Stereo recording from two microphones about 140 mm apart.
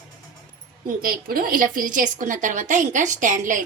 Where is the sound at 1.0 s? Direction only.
90° right; by 3.6 s 65° right (ahead or behind).